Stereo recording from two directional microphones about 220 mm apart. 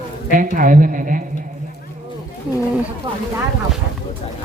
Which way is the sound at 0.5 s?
35° right (ahead or behind).